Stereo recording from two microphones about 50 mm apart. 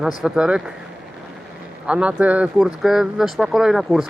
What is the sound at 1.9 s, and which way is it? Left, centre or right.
Speech, right.